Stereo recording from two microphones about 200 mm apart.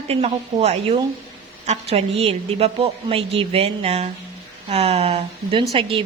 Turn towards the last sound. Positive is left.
turn(degrees=-30)  # may be behind; listen again after turning